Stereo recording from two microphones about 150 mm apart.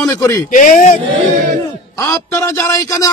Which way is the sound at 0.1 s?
20° left (ahead or behind).